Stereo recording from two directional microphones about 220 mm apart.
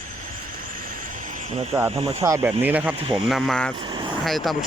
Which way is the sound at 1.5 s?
30° right (ahead or behind).